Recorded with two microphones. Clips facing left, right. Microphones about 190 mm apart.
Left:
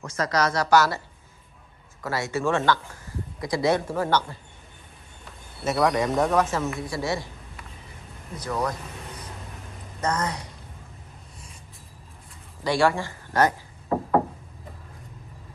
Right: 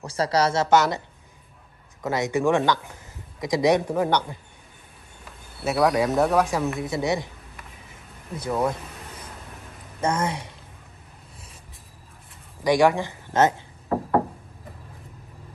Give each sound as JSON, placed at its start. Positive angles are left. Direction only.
{"t": 0.0, "sound": "a woman's voice", "side_deg": -30}
{"t": 2.0, "sound": "speech", "side_deg": -20}
{"t": 5.7, "sound": "speech", "side_deg": -5}
{"t": 6.6, "sound": "speech", "side_deg": 0}
{"t": 6.9, "sound": "a woman's voice", "side_deg": -20}
{"t": 8.4, "sound": "a woman's voice", "side_deg": -25}
{"t": 9.9, "sound": "a woman's voice", "side_deg": -25}
{"t": 12.6, "sound": "a woman's voice", "side_deg": -15}